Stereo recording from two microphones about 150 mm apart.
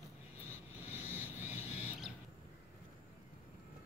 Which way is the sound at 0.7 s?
10° right (ahead or behind).